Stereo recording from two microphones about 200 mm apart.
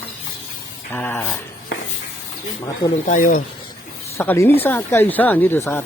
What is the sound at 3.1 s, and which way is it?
Speech, 40° left (ahead or behind).